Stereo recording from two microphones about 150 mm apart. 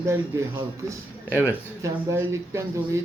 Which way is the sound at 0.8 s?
10° right (ahead or behind).